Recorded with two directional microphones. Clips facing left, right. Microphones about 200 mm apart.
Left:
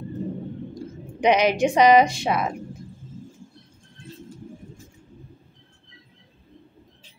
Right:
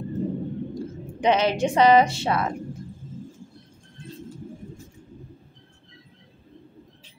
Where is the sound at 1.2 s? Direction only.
15° left (ahead or behind).